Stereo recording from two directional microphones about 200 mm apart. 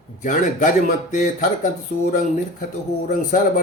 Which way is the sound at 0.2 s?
40° left (ahead or behind).